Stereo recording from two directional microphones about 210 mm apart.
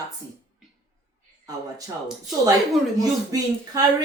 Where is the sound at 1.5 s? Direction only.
15° right (ahead or behind).